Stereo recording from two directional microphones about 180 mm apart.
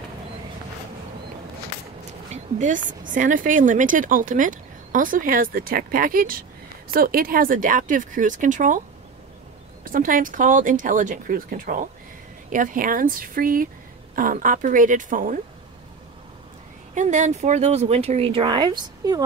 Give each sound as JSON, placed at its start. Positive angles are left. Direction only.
{"t": 2.3, "sound": "speech", "side_deg": -45}
{"t": 9.8, "sound": "speech", "side_deg": -50}
{"t": 16.9, "sound": "speech", "side_deg": -45}